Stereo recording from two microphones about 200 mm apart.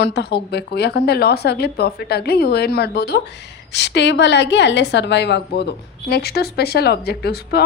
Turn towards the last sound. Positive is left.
turn(degrees=50)  # may be behind; listen again after turning